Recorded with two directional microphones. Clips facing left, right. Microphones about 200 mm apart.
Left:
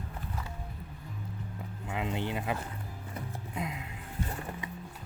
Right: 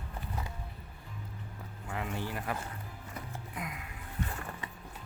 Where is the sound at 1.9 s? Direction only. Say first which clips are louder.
Left 4 dB; 20° left (ahead or behind).